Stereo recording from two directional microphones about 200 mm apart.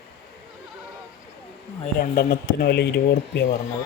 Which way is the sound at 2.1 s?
50° left (ahead or behind).